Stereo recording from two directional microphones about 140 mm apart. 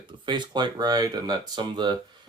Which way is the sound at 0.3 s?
35° right (ahead or behind).